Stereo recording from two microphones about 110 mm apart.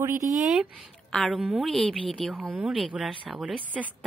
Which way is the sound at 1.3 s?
5° right (ahead or behind).